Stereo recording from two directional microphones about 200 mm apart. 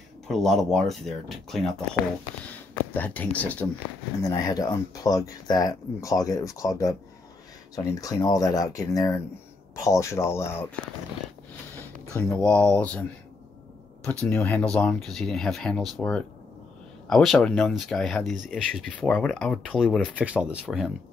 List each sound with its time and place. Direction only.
0.3 s speech: centre (ahead or behind)
2.5 s a sound: 10° left (ahead or behind)
3.3 s speech: 5° left (ahead or behind)
4.2 s speech: 20° left (ahead or behind)
12.1 s speech: 10° left (ahead or behind)
14.2 s speech: 10° left (ahead or behind)